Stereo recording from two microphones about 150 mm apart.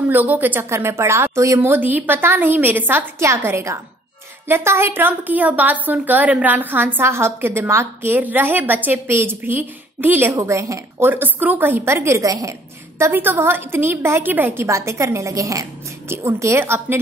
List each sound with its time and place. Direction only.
0.1 s a woman's voice: 10° right (ahead or behind)